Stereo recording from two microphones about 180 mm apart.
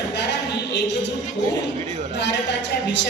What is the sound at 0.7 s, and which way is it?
Speech, 75° left (ahead or behind).